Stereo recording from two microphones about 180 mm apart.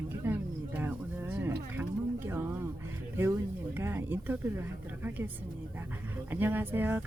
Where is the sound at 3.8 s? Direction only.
10° right (ahead or behind).